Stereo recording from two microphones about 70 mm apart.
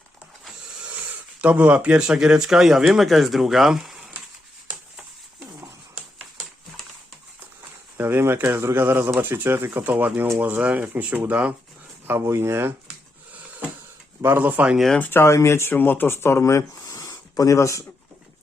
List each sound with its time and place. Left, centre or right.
0.8 s speech: right
7.9 s speech: right
12.0 s speech: right
13.3 s a sound: right
14.3 s speech: right
15.1 s speech: left
15.7 s speech: left
16.8 s a sound: left